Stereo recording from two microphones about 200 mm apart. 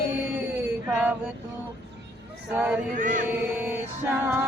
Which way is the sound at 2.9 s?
40° right (ahead or behind).